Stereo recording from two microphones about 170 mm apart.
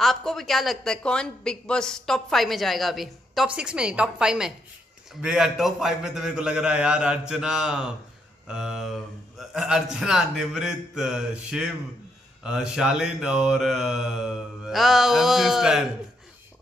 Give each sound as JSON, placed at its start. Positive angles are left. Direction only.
{"t": 0.0, "sound": "a woman's voice", "side_deg": 0}